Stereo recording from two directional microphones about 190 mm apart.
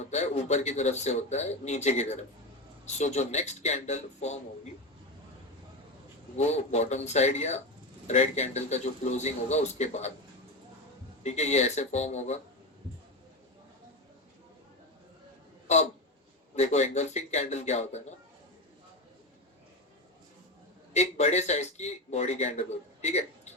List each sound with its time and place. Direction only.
0.0 s a man's voice: 35° left (ahead or behind)
6.3 s a man's voice: 35° left (ahead or behind)
11.2 s a man's voice: 35° left (ahead or behind)
15.6 s a sound: 35° left (ahead or behind)
16.6 s a man's voice: 35° left (ahead or behind)
20.9 s a man's voice: 35° left (ahead or behind)